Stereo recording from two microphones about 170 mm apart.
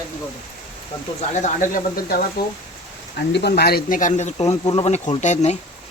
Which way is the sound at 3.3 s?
80° left.